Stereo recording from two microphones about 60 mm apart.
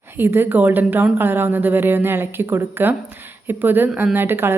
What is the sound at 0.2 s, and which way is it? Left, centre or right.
A woman's voice, right.